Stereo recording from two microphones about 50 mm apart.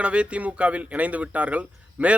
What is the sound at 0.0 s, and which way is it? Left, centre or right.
Speech, right.